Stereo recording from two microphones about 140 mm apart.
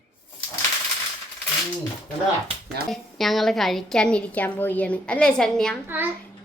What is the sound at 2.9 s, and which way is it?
A woman's voice, centre (ahead or behind).